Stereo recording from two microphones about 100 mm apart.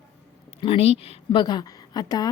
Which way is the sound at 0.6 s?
80° left.